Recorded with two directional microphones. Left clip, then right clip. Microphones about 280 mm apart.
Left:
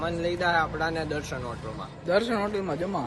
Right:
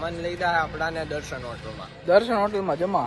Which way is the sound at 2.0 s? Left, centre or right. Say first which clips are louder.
Right 6 dB; centre.